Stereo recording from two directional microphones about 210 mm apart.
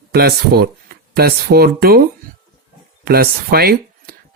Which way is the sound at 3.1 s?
45° right (ahead or behind).